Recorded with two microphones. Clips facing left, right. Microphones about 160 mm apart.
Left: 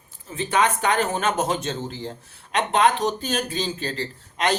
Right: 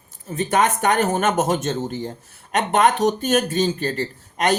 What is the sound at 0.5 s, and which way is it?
Speech, 45° right (ahead or behind).